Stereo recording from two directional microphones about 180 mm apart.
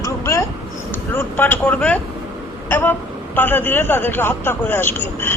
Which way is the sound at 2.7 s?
10° left (ahead or behind).